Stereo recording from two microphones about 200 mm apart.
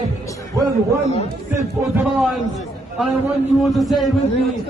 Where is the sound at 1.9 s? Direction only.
Centre (ahead or behind).